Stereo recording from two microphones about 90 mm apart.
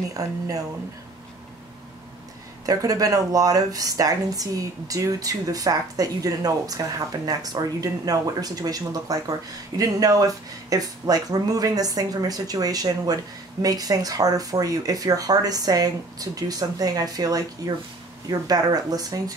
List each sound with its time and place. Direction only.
0.1 s speech: 40° right (ahead or behind)
2.6 s speech: 45° right (ahead or behind)